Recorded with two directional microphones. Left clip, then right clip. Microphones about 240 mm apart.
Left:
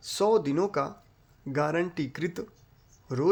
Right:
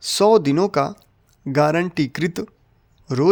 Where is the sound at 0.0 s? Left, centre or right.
Right.